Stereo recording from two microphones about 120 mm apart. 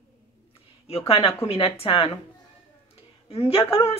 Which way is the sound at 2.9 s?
55° left (ahead or behind).